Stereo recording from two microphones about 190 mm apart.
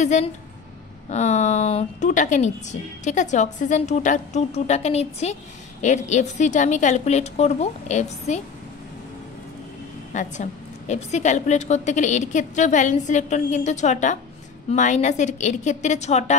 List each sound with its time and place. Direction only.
0.0 s a woman's voice: 40° left (ahead or behind)
10.1 s a woman's voice: 40° left (ahead or behind)